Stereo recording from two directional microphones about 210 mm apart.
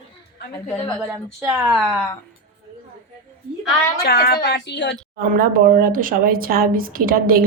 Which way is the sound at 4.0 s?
50° left (ahead or behind).